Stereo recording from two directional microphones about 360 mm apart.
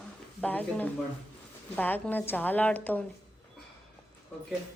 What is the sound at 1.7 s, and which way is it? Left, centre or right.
A woman's voice, centre.